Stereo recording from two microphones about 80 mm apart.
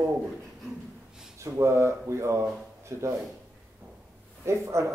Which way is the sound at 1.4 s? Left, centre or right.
Right.